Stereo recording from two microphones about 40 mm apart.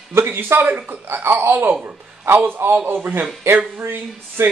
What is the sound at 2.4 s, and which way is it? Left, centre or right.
Speech, right.